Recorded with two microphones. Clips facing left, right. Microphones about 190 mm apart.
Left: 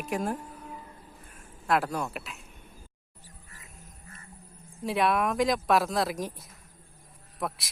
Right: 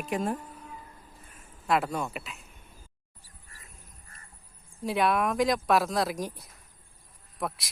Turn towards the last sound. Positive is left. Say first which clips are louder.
# even
turn(degrees=0)  # may be behind; listen again after turning